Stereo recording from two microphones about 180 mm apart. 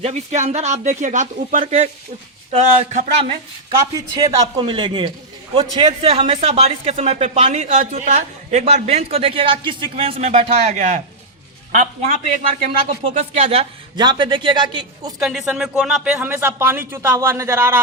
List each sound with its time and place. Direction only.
0.0 s speech: 40° right (ahead or behind)
3.9 s a man's voice: 25° right (ahead or behind); by 11.0 s 45° right (ahead or behind)
12.8 s a man's voice: 35° right (ahead or behind)
15.2 s speech: centre (ahead or behind)